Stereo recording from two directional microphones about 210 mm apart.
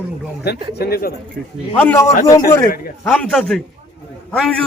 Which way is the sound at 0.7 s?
50° left (ahead or behind).